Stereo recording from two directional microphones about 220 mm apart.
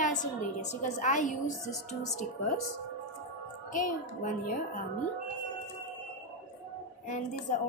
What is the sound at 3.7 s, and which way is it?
Speech, 35° left (ahead or behind).